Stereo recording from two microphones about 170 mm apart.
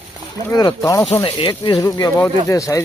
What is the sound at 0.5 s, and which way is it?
Speech, 25° left (ahead or behind).